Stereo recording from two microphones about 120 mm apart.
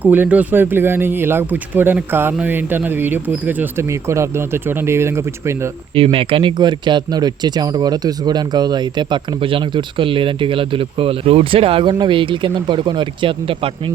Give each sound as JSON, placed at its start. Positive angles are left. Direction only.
{"t": 0.0, "sound": "speech", "side_deg": -15}
{"t": 5.9, "sound": "speech", "side_deg": -50}